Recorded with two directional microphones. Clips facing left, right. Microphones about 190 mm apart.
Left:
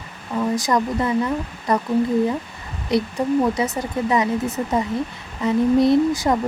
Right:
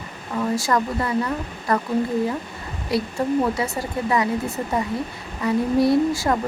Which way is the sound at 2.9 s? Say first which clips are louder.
Left 2 dB; 20° left (ahead or behind).